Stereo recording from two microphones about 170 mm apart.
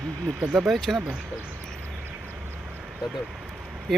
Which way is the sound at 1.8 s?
10° right (ahead or behind).